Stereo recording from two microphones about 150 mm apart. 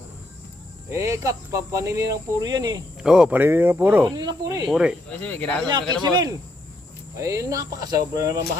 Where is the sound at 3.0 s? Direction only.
5° right (ahead or behind).